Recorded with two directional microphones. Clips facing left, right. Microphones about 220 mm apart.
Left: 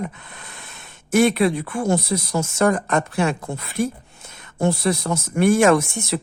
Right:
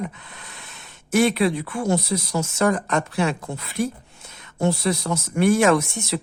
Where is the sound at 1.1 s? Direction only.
50° left (ahead or behind).